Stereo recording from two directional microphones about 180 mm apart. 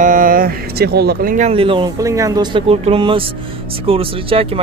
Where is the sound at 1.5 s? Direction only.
30° right (ahead or behind).